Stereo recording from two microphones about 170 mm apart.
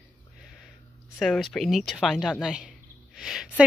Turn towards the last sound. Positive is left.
turn(degrees=-5)  # may be behind; listen again after turning